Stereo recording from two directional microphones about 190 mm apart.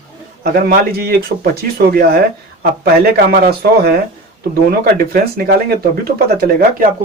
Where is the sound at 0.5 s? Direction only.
50° right (ahead or behind).